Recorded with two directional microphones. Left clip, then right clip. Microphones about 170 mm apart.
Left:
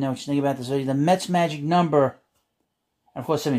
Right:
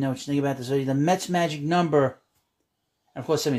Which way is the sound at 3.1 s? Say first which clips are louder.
Even; 5° left (ahead or behind).